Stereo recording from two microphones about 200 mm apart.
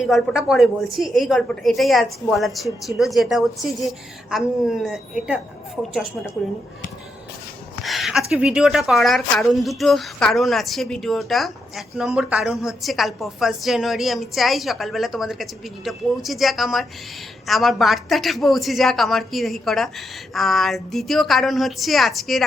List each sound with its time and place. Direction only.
0.0 s a woman's voice: centre (ahead or behind)
7.9 s a woman's voice: centre (ahead or behind)